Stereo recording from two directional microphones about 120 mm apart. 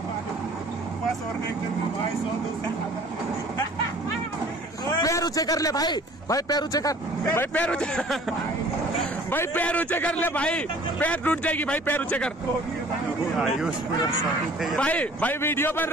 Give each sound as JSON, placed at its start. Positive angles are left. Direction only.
{"t": 5.0, "sound": "a man's voice", "side_deg": 30}
{"t": 7.5, "sound": "a man's voice", "side_deg": 10}
{"t": 9.3, "sound": "a man's voice", "side_deg": 15}
{"t": 13.4, "sound": "speech", "side_deg": -5}
{"t": 14.8, "sound": "a man's voice", "side_deg": 10}